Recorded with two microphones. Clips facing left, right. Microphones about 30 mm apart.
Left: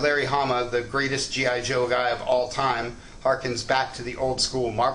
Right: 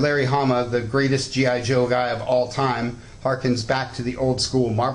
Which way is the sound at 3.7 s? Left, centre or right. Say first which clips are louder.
Right 1 dB; centre.